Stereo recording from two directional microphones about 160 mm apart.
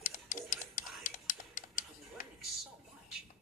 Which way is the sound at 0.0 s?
55° left (ahead or behind).